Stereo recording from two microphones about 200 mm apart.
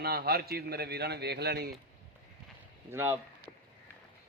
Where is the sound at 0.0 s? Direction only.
50° right (ahead or behind).